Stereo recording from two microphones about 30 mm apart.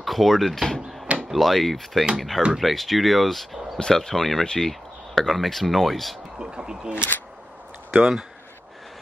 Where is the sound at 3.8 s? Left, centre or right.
Centre.